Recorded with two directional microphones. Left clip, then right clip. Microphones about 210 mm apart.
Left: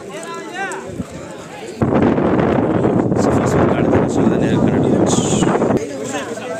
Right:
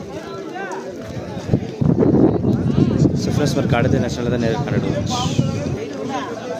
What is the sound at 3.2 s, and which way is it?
Speech, 5° right (ahead or behind).